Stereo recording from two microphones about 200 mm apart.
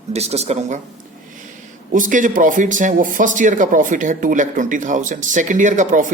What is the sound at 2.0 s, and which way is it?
Speech, 40° right (ahead or behind).